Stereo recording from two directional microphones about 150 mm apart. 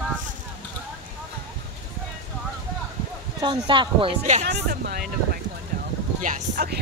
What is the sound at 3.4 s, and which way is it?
Speech, 30° right (ahead or behind).